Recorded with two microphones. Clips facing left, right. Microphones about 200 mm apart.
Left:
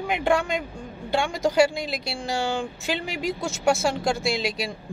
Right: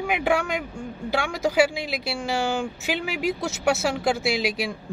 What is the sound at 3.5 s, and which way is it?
Speech, 65° right (ahead or behind).